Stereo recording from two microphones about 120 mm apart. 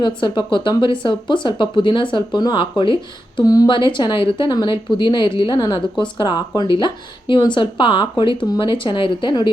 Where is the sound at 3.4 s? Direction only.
30° left (ahead or behind).